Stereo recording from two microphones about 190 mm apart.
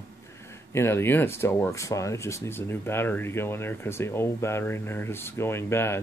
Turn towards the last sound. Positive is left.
turn(degrees=15)  # may be behind; listen again after turning